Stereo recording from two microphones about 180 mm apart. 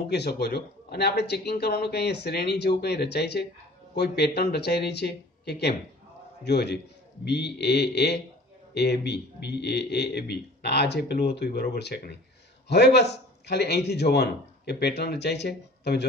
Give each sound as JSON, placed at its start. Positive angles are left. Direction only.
{"t": 0.1, "sound": "a man's voice", "side_deg": 65}